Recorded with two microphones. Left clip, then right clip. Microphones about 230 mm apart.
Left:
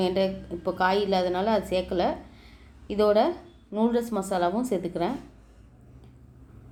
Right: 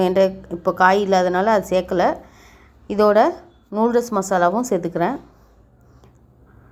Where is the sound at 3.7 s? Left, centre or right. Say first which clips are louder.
Right 8 dB; right.